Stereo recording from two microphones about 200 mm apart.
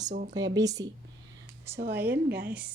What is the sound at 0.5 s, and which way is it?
Speech, 20° right (ahead or behind).